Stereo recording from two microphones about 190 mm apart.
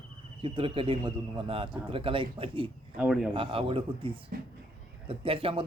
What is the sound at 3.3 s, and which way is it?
Speech, 30° right (ahead or behind).